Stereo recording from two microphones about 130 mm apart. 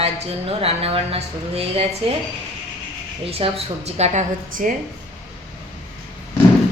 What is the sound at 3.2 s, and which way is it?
A woman's voice, 50° right (ahead or behind).